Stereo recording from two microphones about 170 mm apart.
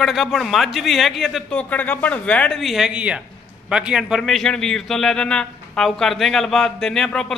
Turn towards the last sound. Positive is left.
turn(degrees=5)  # may be behind; listen again after turning